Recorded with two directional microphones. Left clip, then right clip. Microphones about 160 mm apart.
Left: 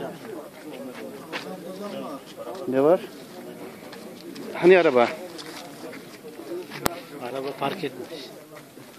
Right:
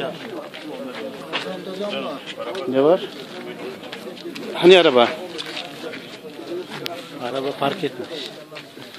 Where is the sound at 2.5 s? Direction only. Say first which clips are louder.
Right 3 dB; 10° left (ahead or behind).